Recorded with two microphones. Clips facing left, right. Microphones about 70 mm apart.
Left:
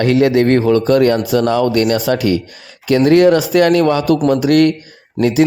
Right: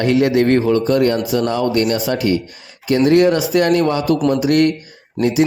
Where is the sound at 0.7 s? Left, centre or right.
Left.